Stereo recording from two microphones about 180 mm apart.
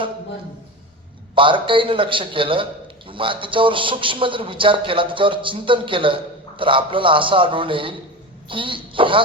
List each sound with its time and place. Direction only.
1.4 s a man's voice: 30° right (ahead or behind)